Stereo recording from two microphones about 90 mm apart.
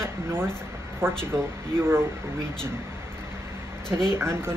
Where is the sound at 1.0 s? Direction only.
25° right (ahead or behind).